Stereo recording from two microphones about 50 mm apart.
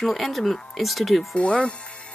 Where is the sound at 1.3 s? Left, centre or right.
Left.